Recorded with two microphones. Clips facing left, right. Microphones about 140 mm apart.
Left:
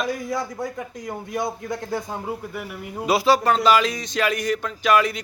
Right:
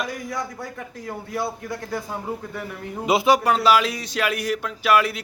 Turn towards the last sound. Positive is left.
turn(degrees=-5)  # may be behind; listen again after turning